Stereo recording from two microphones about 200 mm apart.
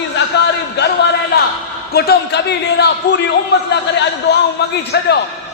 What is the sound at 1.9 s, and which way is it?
A man's voice, 50° left (ahead or behind).